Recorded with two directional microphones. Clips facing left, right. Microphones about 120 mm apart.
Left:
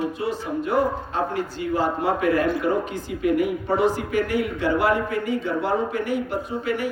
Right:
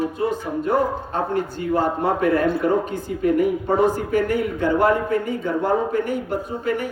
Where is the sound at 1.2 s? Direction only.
50° right (ahead or behind).